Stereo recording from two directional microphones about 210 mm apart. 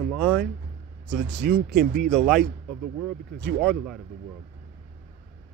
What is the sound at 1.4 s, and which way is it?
Speech, 50° right (ahead or behind).